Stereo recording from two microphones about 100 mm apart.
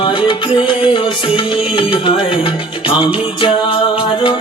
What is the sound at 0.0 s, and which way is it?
Music, 60° left (ahead or behind).